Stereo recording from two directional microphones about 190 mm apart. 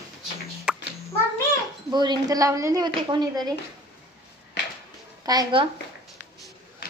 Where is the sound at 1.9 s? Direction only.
20° right (ahead or behind).